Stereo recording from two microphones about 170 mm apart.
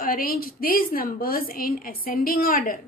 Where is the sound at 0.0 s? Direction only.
55° left (ahead or behind).